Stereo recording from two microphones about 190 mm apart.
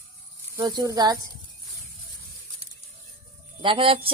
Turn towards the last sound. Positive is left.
turn(degrees=-30)  # may be behind; listen again after turning